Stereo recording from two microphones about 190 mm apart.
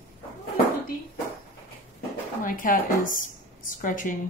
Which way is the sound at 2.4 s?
45° left (ahead or behind).